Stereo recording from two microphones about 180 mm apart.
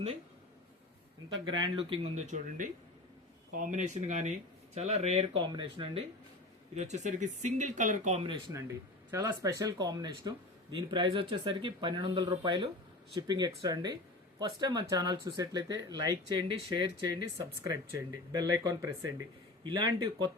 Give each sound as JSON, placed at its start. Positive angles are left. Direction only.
{"t": 1.3, "sound": "speech", "side_deg": -25}
{"t": 6.7, "sound": "speech", "side_deg": -40}
{"t": 9.0, "sound": "speech", "side_deg": -15}